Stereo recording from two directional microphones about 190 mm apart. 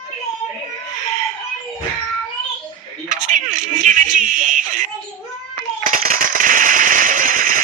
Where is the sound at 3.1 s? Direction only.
45° right (ahead or behind).